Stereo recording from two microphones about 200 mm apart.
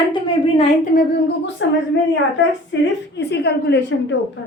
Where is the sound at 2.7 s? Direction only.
65° left (ahead or behind).